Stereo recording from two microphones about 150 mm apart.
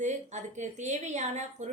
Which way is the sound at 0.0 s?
50° right (ahead or behind).